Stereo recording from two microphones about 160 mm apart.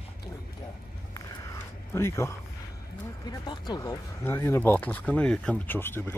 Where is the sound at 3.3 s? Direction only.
25° left (ahead or behind).